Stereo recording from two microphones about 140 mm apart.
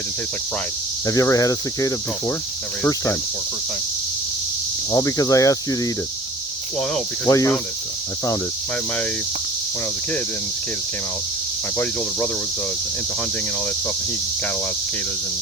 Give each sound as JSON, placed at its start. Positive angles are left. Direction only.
{"t": 1.0, "sound": "cricket", "side_deg": 25}
{"t": 4.9, "sound": "cricket", "side_deg": 25}
{"t": 7.3, "sound": "cricket", "side_deg": 20}